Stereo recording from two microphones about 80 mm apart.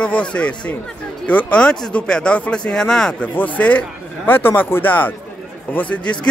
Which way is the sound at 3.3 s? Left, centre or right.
Centre.